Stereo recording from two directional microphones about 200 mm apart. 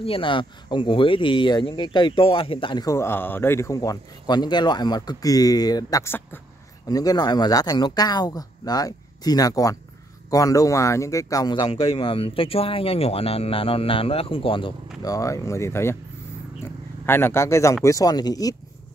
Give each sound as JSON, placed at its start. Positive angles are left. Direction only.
{"t": 0.0, "sound": "speech", "side_deg": 25}
{"t": 17.0, "sound": "speech", "side_deg": 10}